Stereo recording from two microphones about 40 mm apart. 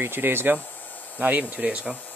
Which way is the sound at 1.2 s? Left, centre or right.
Right.